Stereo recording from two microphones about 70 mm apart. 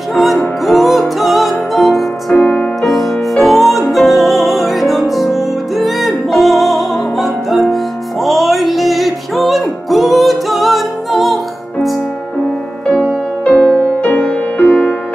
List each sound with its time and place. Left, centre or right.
0.1 s music: centre
2.3 s music: left
2.8 s music: centre
13.4 s music: centre
14.0 s music: left